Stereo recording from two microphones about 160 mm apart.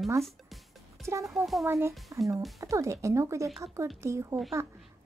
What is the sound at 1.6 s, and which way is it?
A woman's voice, 15° right (ahead or behind).